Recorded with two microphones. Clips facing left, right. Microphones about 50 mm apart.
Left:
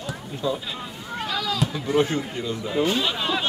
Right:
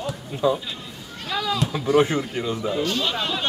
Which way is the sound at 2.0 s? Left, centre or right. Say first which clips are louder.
Right 2 dB; right.